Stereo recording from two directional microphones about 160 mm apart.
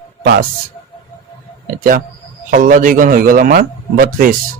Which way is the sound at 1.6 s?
65° right (ahead or behind).